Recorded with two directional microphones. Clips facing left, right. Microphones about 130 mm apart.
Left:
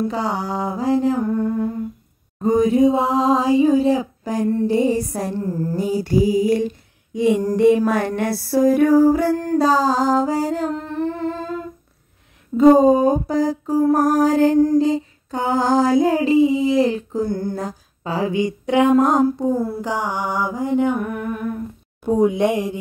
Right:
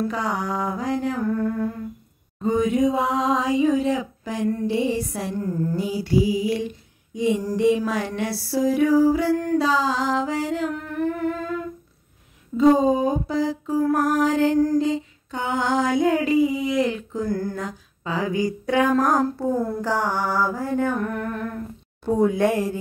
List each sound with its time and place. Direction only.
0.0 s a sound: 30° left (ahead or behind)
2.4 s female singing: 40° left (ahead or behind)
4.6 s music: 40° left (ahead or behind)
5.3 s female singing: 30° left (ahead or behind)
5.9 s music: 45° left (ahead or behind)
7.2 s music: 60° left (ahead or behind); by 11.6 s 30° left (ahead or behind)
12.5 s music: 50° left (ahead or behind)
13.9 s female singing: 40° left (ahead or behind)
17.6 s a sound: 35° left (ahead or behind)
19.2 s mantra: 15° left (ahead or behind)